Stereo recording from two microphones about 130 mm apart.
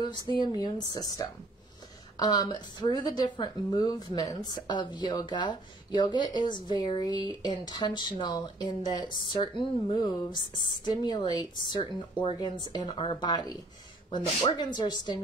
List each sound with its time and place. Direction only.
0.5 s speech: 30° left (ahead or behind)